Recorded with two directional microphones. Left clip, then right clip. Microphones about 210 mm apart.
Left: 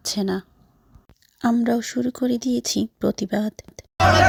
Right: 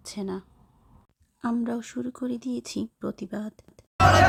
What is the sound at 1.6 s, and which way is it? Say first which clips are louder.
Speech: left 9 dB; 15° left (ahead or behind).